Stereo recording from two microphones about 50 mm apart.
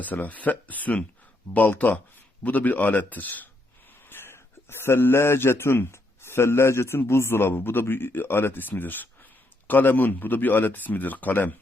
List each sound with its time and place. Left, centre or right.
0.0 s a man's voice: left
4.0 s a man's voice: left